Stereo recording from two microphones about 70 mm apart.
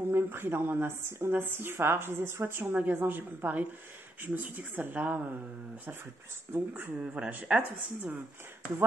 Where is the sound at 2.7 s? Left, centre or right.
Right.